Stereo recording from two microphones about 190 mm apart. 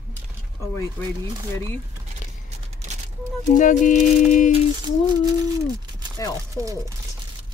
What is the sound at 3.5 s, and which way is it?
Speech, 40° left (ahead or behind).